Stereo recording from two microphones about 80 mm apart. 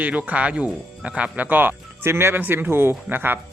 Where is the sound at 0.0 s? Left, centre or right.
Centre.